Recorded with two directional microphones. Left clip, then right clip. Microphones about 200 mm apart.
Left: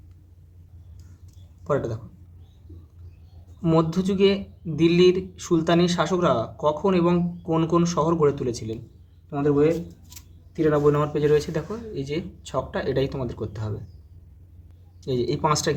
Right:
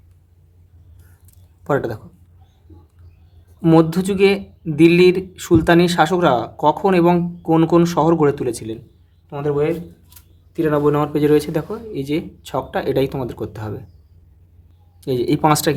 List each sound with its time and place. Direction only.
1.6 s speech: 40° right (ahead or behind)
3.6 s speech: 45° right (ahead or behind)
15.0 s speech: 40° right (ahead or behind)